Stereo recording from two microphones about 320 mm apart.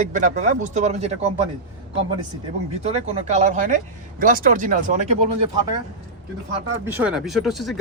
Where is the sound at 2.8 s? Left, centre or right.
Centre.